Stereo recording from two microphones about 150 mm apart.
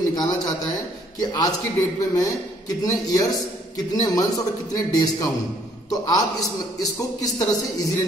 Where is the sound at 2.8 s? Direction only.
25° left (ahead or behind).